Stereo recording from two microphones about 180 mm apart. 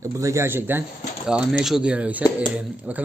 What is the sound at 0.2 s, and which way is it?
A man's voice, 15° right (ahead or behind).